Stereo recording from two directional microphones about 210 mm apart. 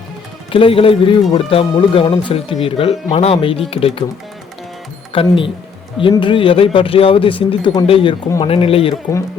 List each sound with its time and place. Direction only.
0.5 s speech: 25° left (ahead or behind)
5.1 s speech: 25° left (ahead or behind)